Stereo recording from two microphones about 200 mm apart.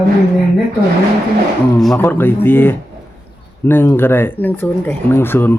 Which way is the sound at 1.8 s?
Centre (ahead or behind).